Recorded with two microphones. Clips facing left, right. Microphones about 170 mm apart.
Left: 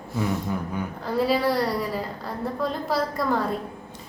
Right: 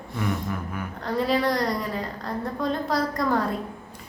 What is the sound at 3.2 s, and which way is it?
Speech, 5° left (ahead or behind).